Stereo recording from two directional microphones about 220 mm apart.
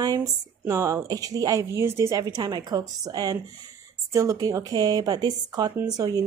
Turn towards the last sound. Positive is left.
turn(degrees=-15)  # may be behind; listen again after turning